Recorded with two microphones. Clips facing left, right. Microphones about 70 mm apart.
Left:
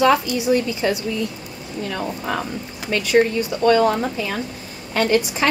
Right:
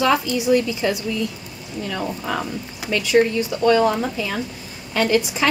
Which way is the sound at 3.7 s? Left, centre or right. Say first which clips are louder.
Left 1 dB; centre.